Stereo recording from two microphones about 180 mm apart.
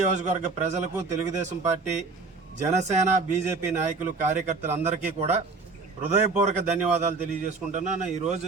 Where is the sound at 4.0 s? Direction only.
40° right (ahead or behind).